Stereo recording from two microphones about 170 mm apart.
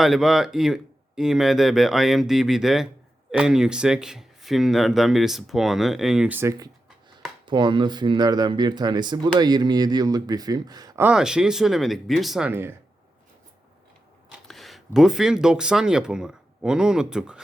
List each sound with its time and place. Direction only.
0.0 s speech: centre (ahead or behind); by 6.7 s 15° right (ahead or behind)
7.4 s speech: 30° right (ahead or behind)
11.0 s speech: 5° right (ahead or behind)
12.5 s speech: 10° right (ahead or behind)
14.3 s speech: centre (ahead or behind)